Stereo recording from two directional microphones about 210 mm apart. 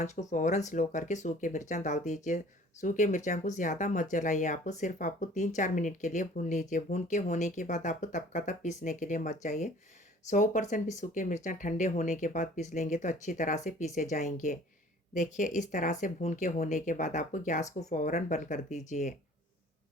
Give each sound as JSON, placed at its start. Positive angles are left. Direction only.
{"t": 0.0, "sound": "speech", "side_deg": 35}